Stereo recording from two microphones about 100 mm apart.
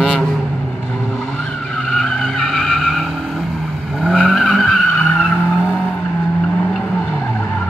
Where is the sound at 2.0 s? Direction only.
5° left (ahead or behind).